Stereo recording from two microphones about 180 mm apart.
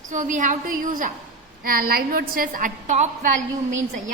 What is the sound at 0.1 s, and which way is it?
A woman's voice, 45° right (ahead or behind).